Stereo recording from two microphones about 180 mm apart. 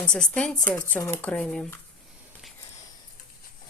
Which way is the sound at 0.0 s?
5° left (ahead or behind).